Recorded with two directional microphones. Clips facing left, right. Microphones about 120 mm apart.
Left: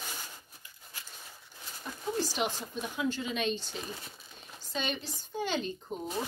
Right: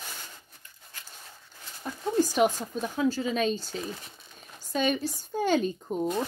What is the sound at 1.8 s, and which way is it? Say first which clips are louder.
A woman's voice: right 7 dB; 50° right (ahead or behind).